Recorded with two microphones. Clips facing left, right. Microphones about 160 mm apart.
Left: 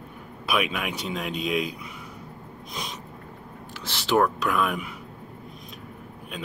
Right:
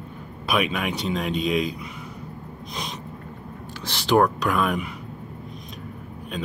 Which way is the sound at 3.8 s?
5° left (ahead or behind).